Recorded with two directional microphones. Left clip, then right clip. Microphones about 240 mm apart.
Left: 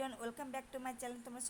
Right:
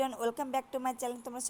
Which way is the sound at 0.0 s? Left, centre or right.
Right.